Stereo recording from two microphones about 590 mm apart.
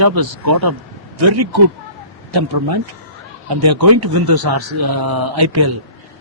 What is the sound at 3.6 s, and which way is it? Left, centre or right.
Speech, right.